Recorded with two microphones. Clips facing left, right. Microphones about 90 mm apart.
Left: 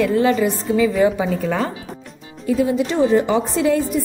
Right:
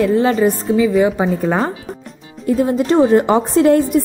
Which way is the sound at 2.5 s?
45° right (ahead or behind).